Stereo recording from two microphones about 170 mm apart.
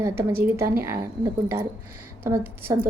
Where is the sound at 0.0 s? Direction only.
15° right (ahead or behind).